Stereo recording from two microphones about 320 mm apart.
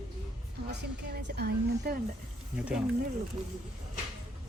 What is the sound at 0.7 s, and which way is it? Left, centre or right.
A woman's voice, right.